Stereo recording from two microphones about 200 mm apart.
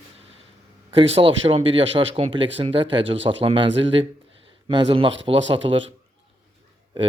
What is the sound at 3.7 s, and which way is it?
Speech, 65° right (ahead or behind).